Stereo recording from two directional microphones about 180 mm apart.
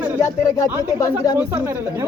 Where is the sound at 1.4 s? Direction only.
15° right (ahead or behind).